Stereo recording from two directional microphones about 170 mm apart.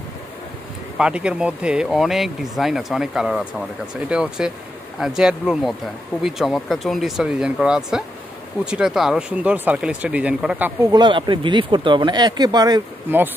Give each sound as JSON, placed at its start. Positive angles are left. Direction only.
{"t": 0.9, "sound": "speech", "side_deg": -5}
{"t": 10.8, "sound": "speech", "side_deg": -25}
{"t": 13.1, "sound": "speech", "side_deg": -10}